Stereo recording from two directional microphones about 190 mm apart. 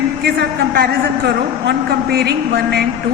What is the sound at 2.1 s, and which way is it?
Speech, 60° right (ahead or behind).